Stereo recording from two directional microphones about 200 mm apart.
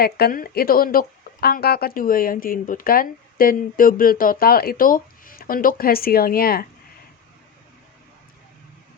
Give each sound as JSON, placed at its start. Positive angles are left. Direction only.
{"t": 0.0, "sound": "speech", "side_deg": 50}